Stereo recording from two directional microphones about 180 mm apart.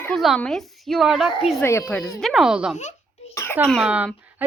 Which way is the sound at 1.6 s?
15° left (ahead or behind).